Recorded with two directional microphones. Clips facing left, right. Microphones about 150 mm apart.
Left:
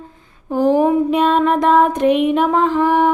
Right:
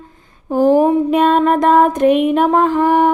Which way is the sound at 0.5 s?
45° right (ahead or behind).